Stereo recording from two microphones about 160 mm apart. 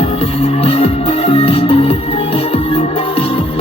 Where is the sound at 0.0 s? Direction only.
40° left (ahead or behind).